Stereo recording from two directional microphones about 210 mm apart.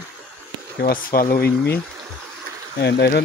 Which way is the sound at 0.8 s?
45° left (ahead or behind).